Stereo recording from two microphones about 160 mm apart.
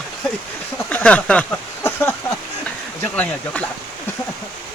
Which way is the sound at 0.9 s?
10° left (ahead or behind).